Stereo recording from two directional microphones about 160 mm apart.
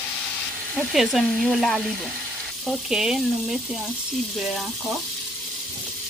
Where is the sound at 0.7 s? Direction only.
Centre (ahead or behind).